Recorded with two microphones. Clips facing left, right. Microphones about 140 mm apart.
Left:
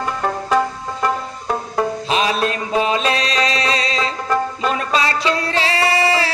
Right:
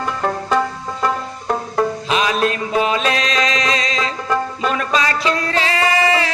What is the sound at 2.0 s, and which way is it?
Music, 35° left (ahead or behind).